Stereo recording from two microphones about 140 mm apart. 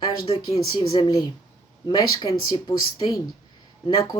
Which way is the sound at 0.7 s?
30° left (ahead or behind).